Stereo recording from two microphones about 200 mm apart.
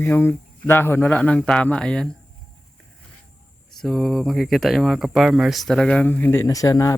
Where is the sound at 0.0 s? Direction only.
10° left (ahead or behind).